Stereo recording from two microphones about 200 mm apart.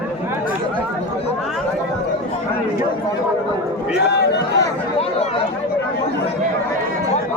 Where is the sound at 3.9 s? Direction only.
55° left (ahead or behind).